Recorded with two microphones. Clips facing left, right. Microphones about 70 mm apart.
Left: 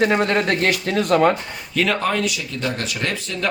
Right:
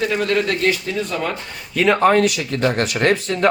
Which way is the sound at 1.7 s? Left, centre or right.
Centre.